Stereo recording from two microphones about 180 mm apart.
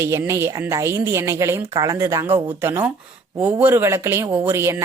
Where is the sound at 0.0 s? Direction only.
15° right (ahead or behind).